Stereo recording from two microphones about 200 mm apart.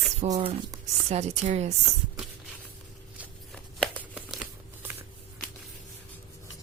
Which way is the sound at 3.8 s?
5° right (ahead or behind).